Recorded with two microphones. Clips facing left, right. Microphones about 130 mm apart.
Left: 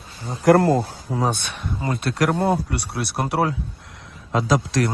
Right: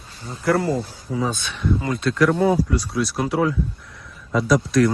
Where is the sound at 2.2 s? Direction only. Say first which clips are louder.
Right 3 dB; 70° left (ahead or behind).